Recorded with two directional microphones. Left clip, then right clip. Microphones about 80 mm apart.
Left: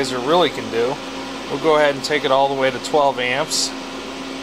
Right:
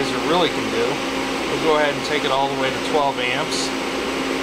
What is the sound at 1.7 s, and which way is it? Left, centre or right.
Speech, left.